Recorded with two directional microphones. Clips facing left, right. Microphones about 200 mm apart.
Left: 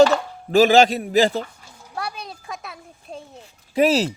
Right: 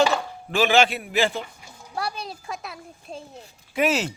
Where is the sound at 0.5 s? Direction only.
40° left (ahead or behind).